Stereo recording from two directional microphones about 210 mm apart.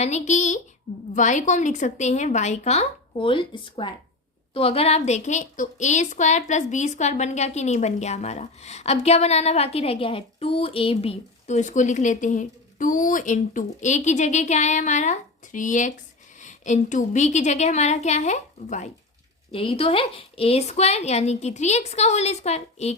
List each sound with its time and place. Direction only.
0.0 s a woman's voice: 35° left (ahead or behind)